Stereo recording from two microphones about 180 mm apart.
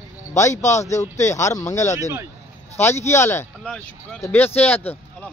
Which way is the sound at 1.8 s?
40° left (ahead or behind).